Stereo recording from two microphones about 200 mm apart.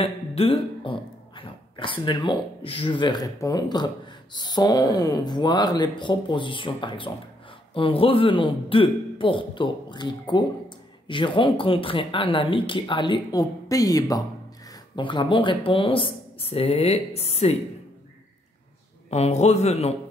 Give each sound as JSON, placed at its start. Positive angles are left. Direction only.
{"t": 0.0, "sound": "a woman's voice", "side_deg": 30}
{"t": 19.0, "sound": "a man's voice", "side_deg": 30}